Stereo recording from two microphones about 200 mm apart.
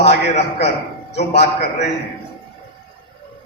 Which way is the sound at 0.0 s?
35° left (ahead or behind).